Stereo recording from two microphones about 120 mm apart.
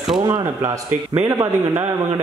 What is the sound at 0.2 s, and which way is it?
A man's voice, 25° right (ahead or behind).